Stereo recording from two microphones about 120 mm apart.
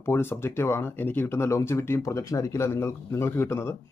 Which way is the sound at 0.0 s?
20° left (ahead or behind).